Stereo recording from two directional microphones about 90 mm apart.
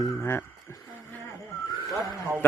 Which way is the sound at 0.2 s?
25° left (ahead or behind).